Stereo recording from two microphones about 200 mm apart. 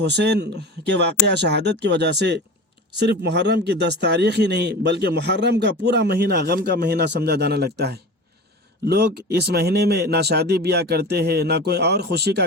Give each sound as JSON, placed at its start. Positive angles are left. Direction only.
{"t": 0.0, "sound": "a man's voice", "side_deg": -55}